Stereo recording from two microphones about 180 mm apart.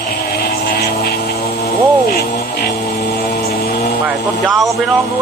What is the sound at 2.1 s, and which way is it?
Speech, 60° left (ahead or behind).